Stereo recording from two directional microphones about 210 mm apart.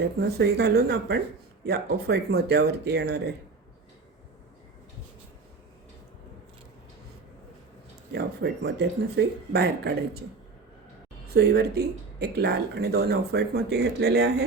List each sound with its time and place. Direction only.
0.0 s speech: 50° right (ahead or behind)
8.1 s speech: 55° right (ahead or behind)
11.3 s speech: 50° right (ahead or behind)